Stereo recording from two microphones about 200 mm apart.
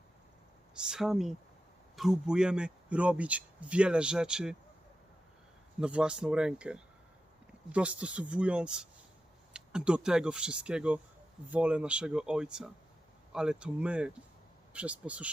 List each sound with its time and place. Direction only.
0.7 s a man's voice: 5° right (ahead or behind)
5.8 s a man's voice: 5° right (ahead or behind)